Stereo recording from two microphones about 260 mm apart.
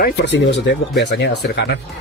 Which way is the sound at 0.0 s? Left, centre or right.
Left.